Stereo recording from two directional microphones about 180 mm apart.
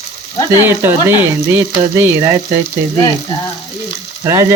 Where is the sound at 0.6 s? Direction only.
10° right (ahead or behind).